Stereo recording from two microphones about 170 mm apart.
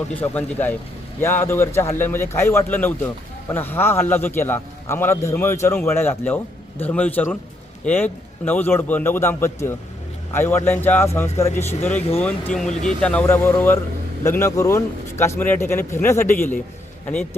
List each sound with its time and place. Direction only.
0.1 s a man's voice: 10° left (ahead or behind)
12.2 s a man's voice: 5° left (ahead or behind)